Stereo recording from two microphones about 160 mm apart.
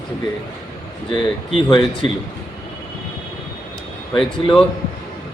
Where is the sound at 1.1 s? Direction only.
30° left (ahead or behind).